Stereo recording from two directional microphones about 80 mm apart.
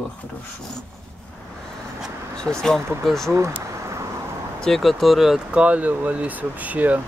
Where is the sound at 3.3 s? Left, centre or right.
Right.